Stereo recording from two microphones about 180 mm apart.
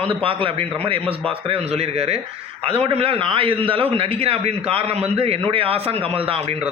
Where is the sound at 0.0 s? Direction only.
30° right (ahead or behind).